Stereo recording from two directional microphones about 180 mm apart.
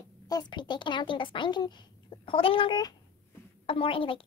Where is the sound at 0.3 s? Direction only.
25° left (ahead or behind).